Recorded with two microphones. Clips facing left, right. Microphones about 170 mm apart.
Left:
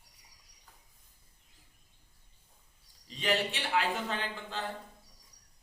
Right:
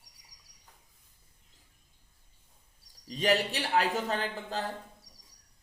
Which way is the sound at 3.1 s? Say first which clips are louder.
Right 4 dB; 40° right (ahead or behind).